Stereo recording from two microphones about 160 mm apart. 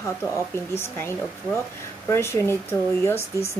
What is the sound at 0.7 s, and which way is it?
Speech, 15° left (ahead or behind).